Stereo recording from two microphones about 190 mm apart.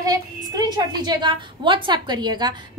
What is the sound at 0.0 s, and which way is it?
A woman's voice, 20° right (ahead or behind).